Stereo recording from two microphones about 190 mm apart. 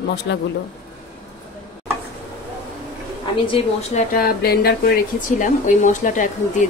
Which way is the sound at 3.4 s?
30° left (ahead or behind).